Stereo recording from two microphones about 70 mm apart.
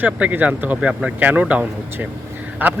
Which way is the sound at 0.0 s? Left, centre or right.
Right.